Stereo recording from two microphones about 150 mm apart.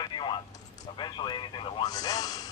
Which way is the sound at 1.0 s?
30° left (ahead or behind).